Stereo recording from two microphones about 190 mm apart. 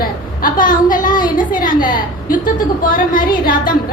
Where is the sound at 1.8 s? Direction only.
45° left (ahead or behind).